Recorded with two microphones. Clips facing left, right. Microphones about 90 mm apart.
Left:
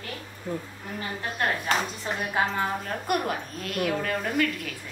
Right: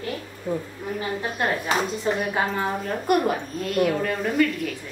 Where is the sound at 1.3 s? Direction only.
5° right (ahead or behind).